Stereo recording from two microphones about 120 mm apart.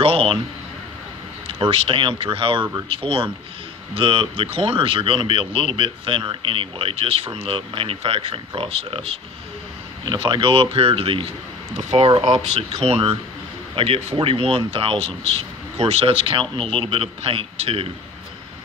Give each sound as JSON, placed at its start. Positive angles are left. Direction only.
{"t": 0.0, "sound": "a man's voice", "side_deg": -50}
{"t": 1.5, "sound": "speech", "side_deg": -55}
{"t": 10.0, "sound": "speech", "side_deg": -40}